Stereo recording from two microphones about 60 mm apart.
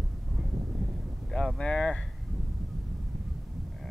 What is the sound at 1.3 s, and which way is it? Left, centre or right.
Speech, centre.